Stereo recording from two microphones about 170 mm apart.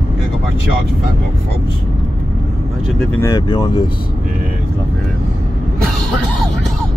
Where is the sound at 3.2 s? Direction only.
25° left (ahead or behind).